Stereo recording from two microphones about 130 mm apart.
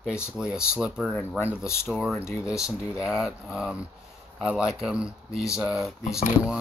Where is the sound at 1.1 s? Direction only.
15° left (ahead or behind).